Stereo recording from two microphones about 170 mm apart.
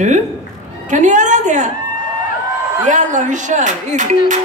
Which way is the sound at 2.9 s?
45° right (ahead or behind).